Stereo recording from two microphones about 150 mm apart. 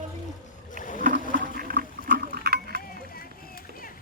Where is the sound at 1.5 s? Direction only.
85° right.